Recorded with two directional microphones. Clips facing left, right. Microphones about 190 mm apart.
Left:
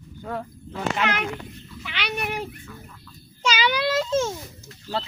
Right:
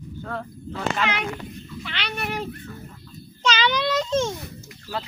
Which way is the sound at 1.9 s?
10° left (ahead or behind).